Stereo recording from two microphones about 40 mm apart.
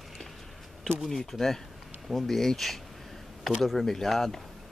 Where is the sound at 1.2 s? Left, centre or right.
Centre.